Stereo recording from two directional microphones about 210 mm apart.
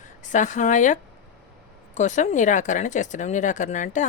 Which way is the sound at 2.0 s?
35° left (ahead or behind).